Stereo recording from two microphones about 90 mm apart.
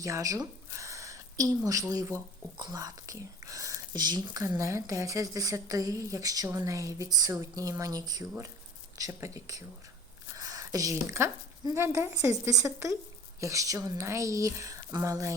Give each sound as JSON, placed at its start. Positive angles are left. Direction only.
{"t": 0.0, "sound": "a woman's voice", "side_deg": -40}
{"t": 2.6, "sound": "speech", "side_deg": -50}
{"t": 4.4, "sound": "a woman's voice", "side_deg": -35}
{"t": 10.3, "sound": "a sound", "side_deg": -40}
{"t": 11.6, "sound": "a woman's voice", "side_deg": -45}